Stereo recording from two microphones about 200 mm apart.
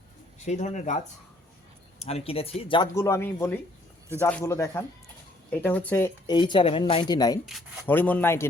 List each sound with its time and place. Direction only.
0.3 s speech: 35° left (ahead or behind); by 6.1 s 10° left (ahead or behind)
6.2 s speech: 25° left (ahead or behind)
7.9 s speech: 10° left (ahead or behind)